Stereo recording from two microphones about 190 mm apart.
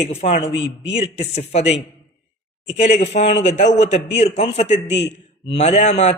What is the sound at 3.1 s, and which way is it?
A man's voice, 40° left (ahead or behind).